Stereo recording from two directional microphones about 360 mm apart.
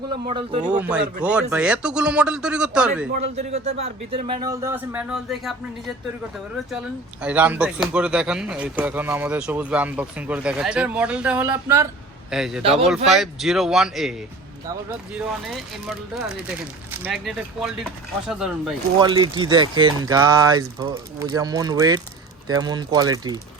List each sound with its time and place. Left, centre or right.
0.3 s speech: centre
0.6 s speech: centre
3.2 s speech: centre
7.2 s speech: centre
15.4 s speech: centre
18.9 s speech: centre